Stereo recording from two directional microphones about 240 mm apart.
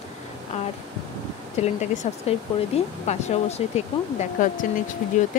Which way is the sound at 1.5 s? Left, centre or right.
Left.